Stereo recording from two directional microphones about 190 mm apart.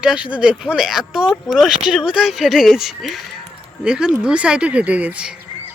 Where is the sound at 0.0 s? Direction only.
5° right (ahead or behind).